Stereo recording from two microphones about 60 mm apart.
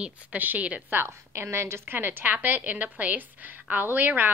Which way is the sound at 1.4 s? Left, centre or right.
Right.